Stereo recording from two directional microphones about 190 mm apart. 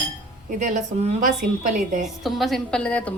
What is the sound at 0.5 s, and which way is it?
Speech, 40° right (ahead or behind).